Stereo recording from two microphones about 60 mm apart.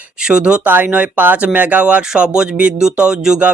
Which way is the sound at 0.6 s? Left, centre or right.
Right.